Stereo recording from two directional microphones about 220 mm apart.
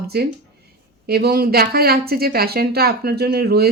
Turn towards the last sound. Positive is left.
turn(degrees=-45)  # may be behind; listen again after turning